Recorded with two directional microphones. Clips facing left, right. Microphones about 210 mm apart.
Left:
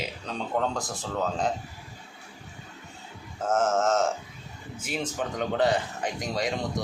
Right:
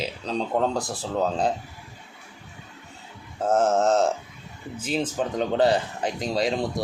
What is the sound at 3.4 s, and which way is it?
Speech, 35° right (ahead or behind).